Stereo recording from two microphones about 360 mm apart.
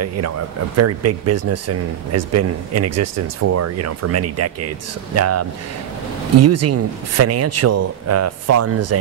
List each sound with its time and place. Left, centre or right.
0.7 s speech: right